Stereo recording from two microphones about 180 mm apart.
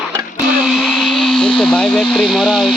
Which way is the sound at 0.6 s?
Centre (ahead or behind).